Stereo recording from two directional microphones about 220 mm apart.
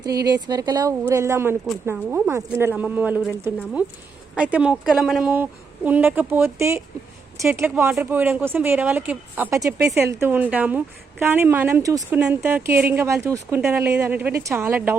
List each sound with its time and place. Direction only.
0.3 s speech: 15° right (ahead or behind)